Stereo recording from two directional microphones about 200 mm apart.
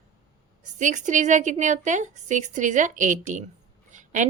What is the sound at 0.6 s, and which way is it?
A woman's voice, 40° right (ahead or behind).